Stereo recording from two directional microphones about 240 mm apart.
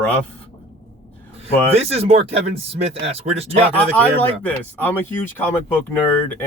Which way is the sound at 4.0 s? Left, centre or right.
Centre.